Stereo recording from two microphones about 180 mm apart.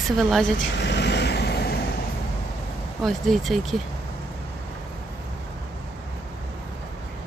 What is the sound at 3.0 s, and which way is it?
Speech, centre (ahead or behind).